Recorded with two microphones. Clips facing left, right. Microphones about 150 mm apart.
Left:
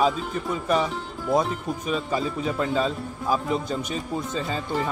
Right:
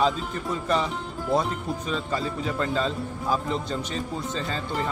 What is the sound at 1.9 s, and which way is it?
Speech, 15° left (ahead or behind).